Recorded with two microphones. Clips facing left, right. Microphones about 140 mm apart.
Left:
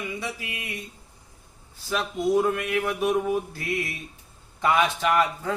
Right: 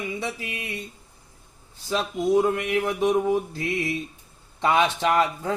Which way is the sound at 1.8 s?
15° right (ahead or behind).